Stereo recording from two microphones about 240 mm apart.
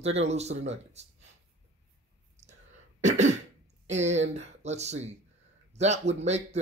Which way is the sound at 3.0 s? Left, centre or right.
Right.